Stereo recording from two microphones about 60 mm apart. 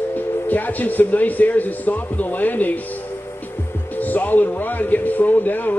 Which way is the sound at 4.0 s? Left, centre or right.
Left.